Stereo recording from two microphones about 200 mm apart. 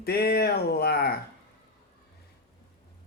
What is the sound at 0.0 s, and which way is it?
Speech, 50° left (ahead or behind).